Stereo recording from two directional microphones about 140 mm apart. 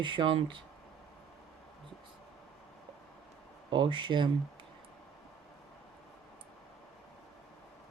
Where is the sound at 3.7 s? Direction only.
35° right (ahead or behind).